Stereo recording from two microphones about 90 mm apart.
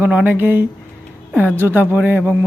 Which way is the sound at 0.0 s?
15° right (ahead or behind).